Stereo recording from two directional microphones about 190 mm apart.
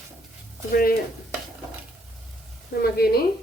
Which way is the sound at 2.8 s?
55° left (ahead or behind).